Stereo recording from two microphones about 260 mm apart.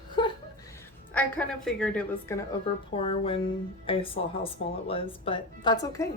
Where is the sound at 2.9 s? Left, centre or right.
Left.